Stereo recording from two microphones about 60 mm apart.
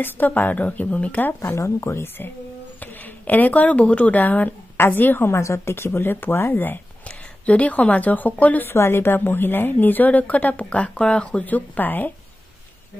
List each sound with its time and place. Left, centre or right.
0.0 s a woman's voice: left
1.4 s speech: left
2.8 s speech: left
8.6 s a woman's voice: left